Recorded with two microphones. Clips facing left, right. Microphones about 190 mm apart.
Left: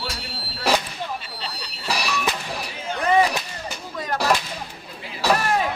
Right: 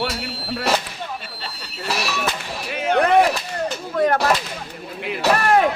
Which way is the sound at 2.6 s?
70° right (ahead or behind).